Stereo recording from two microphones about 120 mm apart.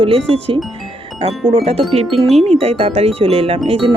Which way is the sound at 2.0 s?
Centre (ahead or behind).